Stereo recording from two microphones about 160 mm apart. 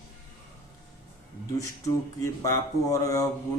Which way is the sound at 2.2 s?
20° left (ahead or behind).